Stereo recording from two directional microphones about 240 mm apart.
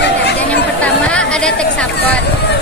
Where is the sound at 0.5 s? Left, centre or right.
Centre.